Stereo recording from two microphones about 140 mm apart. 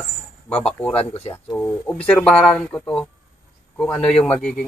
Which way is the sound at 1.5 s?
10° left (ahead or behind).